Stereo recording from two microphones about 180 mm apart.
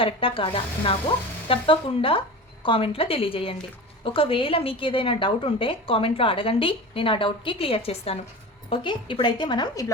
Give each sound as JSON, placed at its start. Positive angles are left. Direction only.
{"t": 0.0, "sound": "a woman's voice", "side_deg": 30}